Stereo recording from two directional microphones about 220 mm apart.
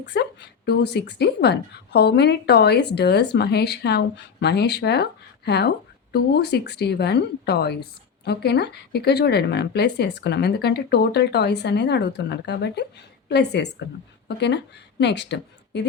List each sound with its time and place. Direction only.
0.0 s speech: 50° left (ahead or behind)